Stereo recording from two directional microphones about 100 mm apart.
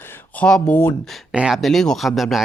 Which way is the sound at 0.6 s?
20° left (ahead or behind).